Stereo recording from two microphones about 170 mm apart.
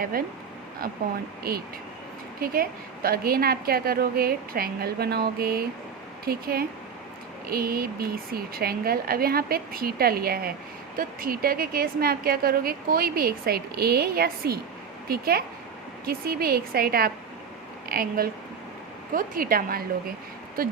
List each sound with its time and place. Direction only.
0.0 s a woman's voice: 60° right (ahead or behind)
1.5 s a woman's voice: 65° right (ahead or behind)